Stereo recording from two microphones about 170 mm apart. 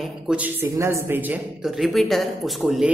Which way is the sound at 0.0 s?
5° right (ahead or behind).